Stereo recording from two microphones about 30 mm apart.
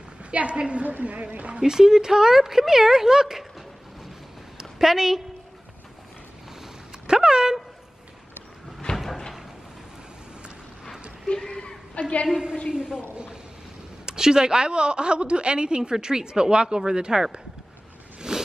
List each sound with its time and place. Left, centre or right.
0.2 s a woman's voice: right
1.6 s speech: centre
4.7 s speech: centre
7.1 s a woman's voice: right
8.9 s door: centre
11.3 s a sound: left
11.9 s a woman's voice: left
12.6 s a woman's voice: right
13.1 s a sound: right
14.0 s a woman's voice: right
18.3 s zipper: right